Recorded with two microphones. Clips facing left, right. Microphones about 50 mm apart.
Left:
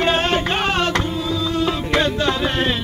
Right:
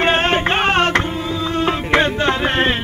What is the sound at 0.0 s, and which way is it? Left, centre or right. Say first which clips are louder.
Music: right 2 dB; right.